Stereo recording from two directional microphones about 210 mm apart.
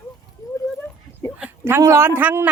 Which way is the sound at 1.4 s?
10° right (ahead or behind).